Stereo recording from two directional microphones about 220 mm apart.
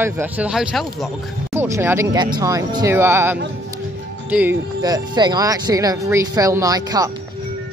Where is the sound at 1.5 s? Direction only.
10° right (ahead or behind).